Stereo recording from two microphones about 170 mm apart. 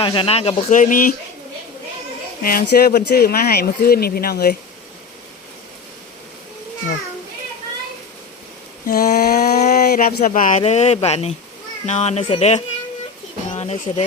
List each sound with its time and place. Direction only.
0.0 s speech: 30° left (ahead or behind); by 1.1 s 50° left (ahead or behind)
2.4 s speech: 60° left (ahead or behind)
8.9 s speech: 60° left (ahead or behind)
9.3 s a sound: 45° left (ahead or behind)
9.8 s speech: 60° left (ahead or behind)
10.6 s speech: 40° left (ahead or behind)
13.5 s pigeon: 40° left (ahead or behind)